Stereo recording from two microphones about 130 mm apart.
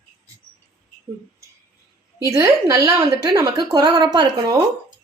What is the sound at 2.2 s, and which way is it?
A woman's voice, 25° right (ahead or behind).